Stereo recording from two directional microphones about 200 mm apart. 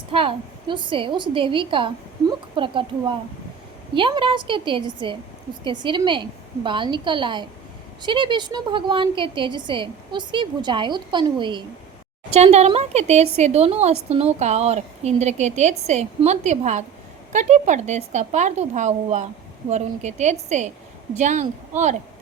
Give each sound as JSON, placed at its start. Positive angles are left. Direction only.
{"t": 0.1, "sound": "a woman's voice", "side_deg": -25}